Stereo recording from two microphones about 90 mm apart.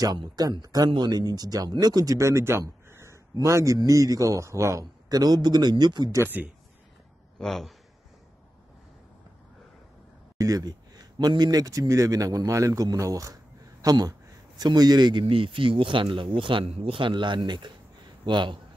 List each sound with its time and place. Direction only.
0.0 s speech: 45° right (ahead or behind)
5.1 s a man's voice: 45° right (ahead or behind)
6.2 s a man's voice: 15° right (ahead or behind)
7.3 s a man's voice: 5° left (ahead or behind)
10.3 s a man's voice: 40° right (ahead or behind)
15.2 s a man's voice: 80° right; by 18.6 s 60° right (ahead or behind)